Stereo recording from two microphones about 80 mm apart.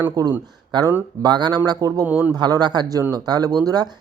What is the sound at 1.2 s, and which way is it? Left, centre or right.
Speech, right.